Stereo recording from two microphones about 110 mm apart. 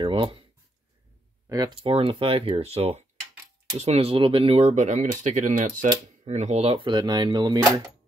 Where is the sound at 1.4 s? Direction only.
35° right (ahead or behind).